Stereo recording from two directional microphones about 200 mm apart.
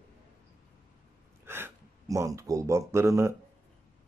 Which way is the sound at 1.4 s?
10° right (ahead or behind).